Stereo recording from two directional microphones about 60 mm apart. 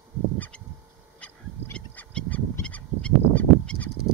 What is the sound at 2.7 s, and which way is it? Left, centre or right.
Fowl, left.